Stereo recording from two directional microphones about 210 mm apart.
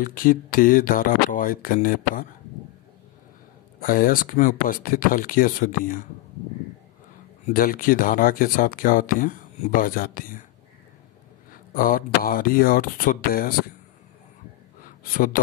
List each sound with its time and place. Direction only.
0.0 s speech: 40° left (ahead or behind)
3.8 s speech: 40° left (ahead or behind)
7.4 s speech: 40° left (ahead or behind)
11.5 s speech: 40° left (ahead or behind)
14.9 s a sound: 40° left (ahead or behind)